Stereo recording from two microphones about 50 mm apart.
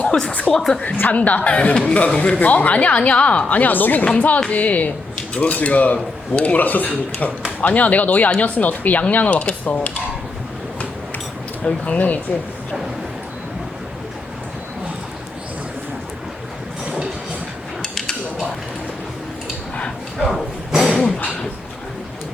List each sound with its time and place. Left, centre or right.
0.0 s music: left
0.7 s a woman's voice: centre
0.9 s a woman's voice: left
11.6 s speech: left
17.8 s dishes: centre
20.1 s a sound: centre